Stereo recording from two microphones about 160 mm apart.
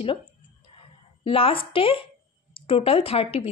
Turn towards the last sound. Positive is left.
turn(degrees=40)  # may be behind; listen again after turning